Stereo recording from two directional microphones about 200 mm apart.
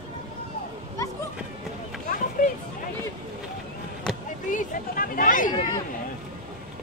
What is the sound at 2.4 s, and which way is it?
Music, 45° left (ahead or behind).